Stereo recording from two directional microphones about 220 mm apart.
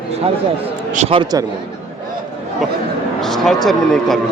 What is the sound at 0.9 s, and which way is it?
Speech, 30° right (ahead or behind).